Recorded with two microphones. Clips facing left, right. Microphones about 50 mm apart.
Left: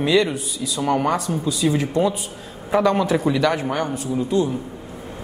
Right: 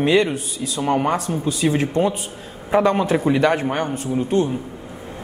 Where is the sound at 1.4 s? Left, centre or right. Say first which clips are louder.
Right 1 dB; right.